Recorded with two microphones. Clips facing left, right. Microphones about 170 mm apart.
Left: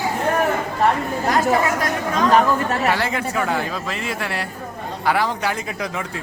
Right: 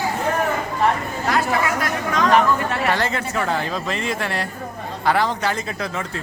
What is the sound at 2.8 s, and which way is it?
Speech, 10° left (ahead or behind).